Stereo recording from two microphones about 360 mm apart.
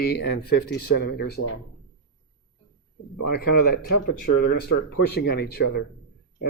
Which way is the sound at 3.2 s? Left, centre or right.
Left.